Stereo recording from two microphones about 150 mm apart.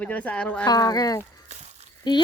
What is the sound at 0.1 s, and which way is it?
Speech, 10° left (ahead or behind).